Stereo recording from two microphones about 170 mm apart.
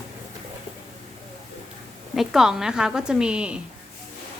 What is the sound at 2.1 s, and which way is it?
A woman's voice, centre (ahead or behind).